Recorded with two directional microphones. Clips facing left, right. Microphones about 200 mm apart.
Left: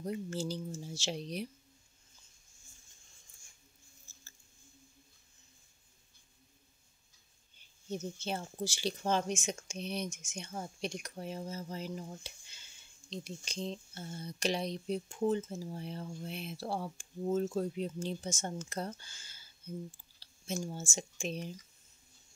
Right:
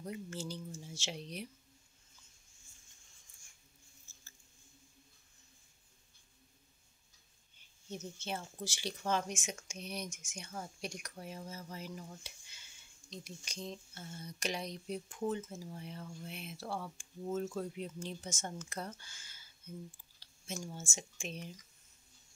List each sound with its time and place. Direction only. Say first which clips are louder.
0.0 s speech: left 6 dB; 35° left (ahead or behind)
7.9 s speech: left 4 dB; 35° left (ahead or behind)